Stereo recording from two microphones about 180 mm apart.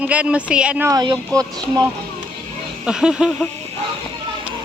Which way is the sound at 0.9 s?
20° right (ahead or behind).